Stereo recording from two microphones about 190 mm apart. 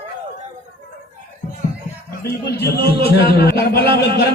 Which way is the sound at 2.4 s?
60° left (ahead or behind).